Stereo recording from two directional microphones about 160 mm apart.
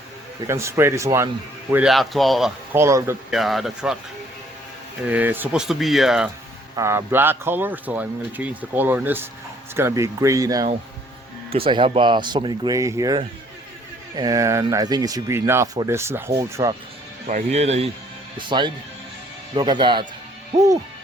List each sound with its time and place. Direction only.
0.4 s speech: 15° right (ahead or behind)
1.7 s speech: 5° right (ahead or behind)
2.7 s speech: 15° right (ahead or behind)
3.2 s speech: centre (ahead or behind)
5.0 s speech: 10° right (ahead or behind)
6.7 s speech: 15° right (ahead or behind)
11.5 s speech: 35° right (ahead or behind); by 16.7 s 20° right (ahead or behind)
17.2 s speech: 45° right (ahead or behind)
18.3 s speech: 30° right (ahead or behind)